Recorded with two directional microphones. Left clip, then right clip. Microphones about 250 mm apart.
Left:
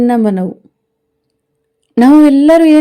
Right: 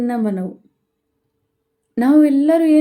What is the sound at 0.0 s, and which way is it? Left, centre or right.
Speech, left.